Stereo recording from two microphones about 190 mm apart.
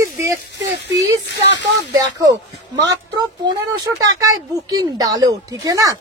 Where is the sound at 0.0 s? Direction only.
15° right (ahead or behind).